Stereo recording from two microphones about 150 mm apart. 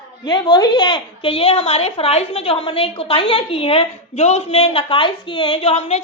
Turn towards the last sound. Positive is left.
turn(degrees=45)  # may be behind; listen again after turning